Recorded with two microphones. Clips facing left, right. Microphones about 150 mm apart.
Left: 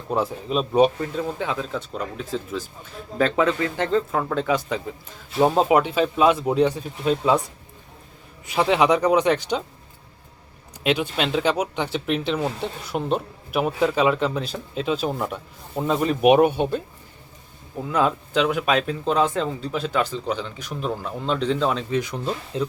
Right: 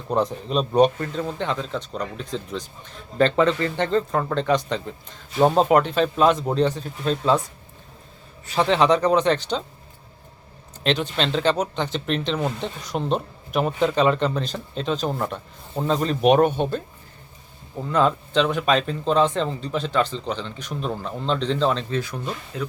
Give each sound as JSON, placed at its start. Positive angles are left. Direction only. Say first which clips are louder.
{"t": 0.1, "sound": "a man's voice", "louder": "right 1 dB", "side_deg": 5}
{"t": 10.8, "sound": "speech", "louder": "even", "side_deg": 10}
{"t": 22.2, "sound": "speech", "louder": "left 4 dB", "side_deg": 30}